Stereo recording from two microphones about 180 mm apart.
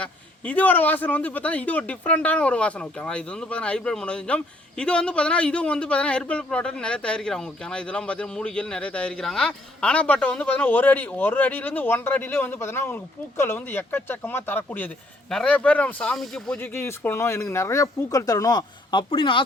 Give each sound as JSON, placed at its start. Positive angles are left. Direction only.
{"t": 0.0, "sound": "a man's voice", "side_deg": 10}
{"t": 16.6, "sound": "a man's voice", "side_deg": 15}